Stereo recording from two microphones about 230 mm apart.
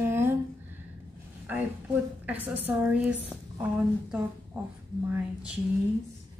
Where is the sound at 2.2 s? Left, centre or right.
Centre.